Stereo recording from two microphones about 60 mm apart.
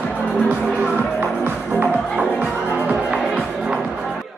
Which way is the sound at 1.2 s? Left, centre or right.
Right.